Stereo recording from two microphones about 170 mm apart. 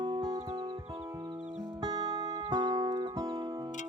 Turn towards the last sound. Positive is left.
turn(degrees=-25)  # may be behind; listen again after turning